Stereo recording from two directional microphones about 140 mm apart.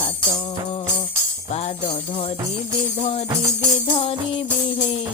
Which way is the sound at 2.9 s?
55° left (ahead or behind).